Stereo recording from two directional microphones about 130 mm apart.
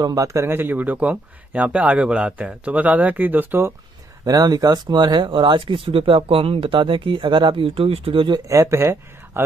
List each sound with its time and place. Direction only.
0.0 s speech: 25° right (ahead or behind)
4.2 s speech: 30° right (ahead or behind)
8.5 s speech: 25° right (ahead or behind)